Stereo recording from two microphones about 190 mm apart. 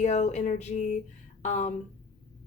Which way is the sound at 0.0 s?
35° left (ahead or behind).